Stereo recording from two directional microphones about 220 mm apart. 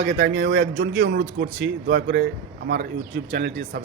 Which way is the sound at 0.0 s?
55° right (ahead or behind).